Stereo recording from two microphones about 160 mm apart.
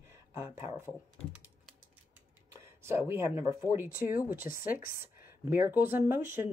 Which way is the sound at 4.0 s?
60° left (ahead or behind).